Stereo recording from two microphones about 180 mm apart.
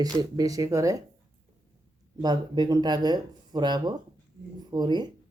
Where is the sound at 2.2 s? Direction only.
20° right (ahead or behind).